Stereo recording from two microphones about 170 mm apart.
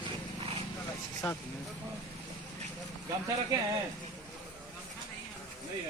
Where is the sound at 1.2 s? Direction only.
5° left (ahead or behind).